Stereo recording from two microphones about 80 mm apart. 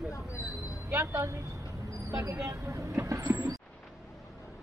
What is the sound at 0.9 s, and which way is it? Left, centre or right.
Speech, right.